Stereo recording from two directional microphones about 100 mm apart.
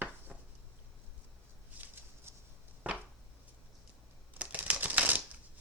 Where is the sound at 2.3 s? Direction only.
25° right (ahead or behind).